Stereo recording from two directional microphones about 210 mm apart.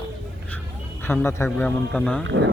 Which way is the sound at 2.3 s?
60° right (ahead or behind).